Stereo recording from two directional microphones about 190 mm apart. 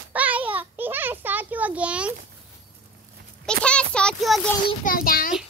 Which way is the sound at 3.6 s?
5° left (ahead or behind).